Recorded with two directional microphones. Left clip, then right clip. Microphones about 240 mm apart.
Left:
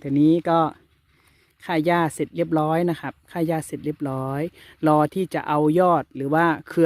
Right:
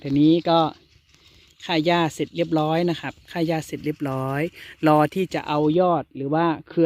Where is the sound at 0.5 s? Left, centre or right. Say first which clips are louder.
Right 1 dB; centre.